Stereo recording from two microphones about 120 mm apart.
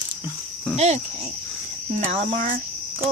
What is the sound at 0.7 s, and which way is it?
Speech, 65° right (ahead or behind).